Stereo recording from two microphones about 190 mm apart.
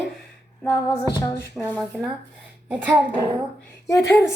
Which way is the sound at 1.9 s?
Centre (ahead or behind).